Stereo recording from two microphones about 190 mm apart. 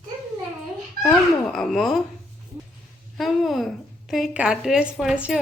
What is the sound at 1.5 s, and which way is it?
Speech, centre (ahead or behind).